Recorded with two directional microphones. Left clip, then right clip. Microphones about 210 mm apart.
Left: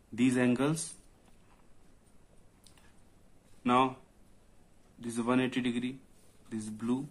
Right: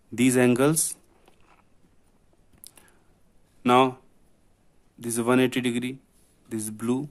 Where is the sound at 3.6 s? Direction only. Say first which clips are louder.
Right 8 dB; 50° right (ahead or behind).